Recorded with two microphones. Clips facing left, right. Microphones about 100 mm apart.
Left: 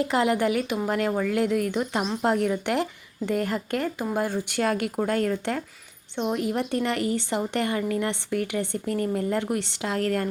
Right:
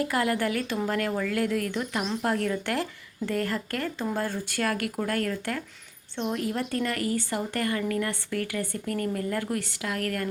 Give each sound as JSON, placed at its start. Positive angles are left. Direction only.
{"t": 0.0, "sound": "a woman's voice", "side_deg": 20}